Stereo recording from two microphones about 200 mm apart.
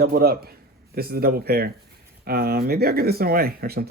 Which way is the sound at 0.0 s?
50° right (ahead or behind).